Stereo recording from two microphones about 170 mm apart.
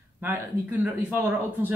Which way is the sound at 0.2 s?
10° right (ahead or behind).